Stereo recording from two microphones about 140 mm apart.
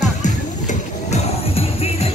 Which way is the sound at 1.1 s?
45° left (ahead or behind).